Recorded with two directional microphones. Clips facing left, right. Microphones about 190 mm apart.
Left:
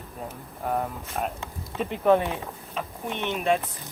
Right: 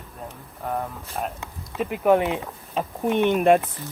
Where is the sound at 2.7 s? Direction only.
35° right (ahead or behind).